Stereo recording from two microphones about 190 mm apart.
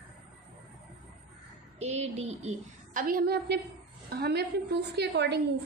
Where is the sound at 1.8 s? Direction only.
35° right (ahead or behind).